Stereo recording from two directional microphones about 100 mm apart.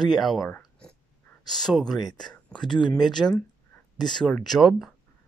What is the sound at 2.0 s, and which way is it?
Speech, 45° left (ahead or behind).